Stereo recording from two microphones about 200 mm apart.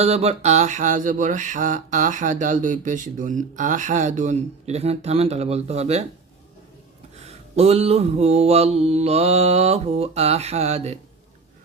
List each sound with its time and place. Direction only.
0.0 s mantra: 30° right (ahead or behind)
7.3 s mantra: 30° right (ahead or behind)